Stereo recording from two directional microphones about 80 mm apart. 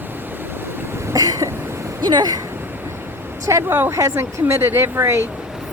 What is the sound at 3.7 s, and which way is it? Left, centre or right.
Speech, right.